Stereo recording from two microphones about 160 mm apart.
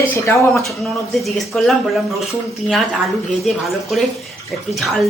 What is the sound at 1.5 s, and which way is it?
Speech, 5° left (ahead or behind).